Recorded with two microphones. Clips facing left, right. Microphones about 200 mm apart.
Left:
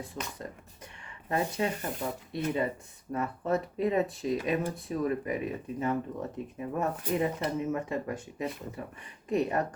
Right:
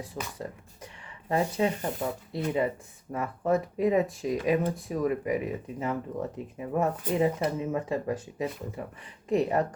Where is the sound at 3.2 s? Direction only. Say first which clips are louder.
Right 4 dB; 15° right (ahead or behind).